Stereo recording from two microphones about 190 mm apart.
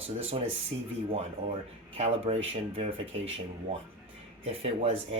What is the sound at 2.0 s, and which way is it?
Speech, 35° right (ahead or behind).